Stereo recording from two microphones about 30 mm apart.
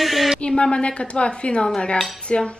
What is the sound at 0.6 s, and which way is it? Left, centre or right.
A woman's voice, left.